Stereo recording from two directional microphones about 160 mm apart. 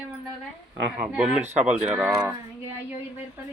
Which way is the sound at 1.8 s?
10° right (ahead or behind).